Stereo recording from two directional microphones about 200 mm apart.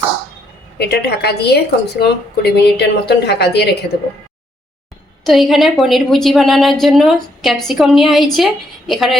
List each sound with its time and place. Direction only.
0.8 s a woman's voice: 55° left (ahead or behind)
5.2 s a woman's voice: centre (ahead or behind)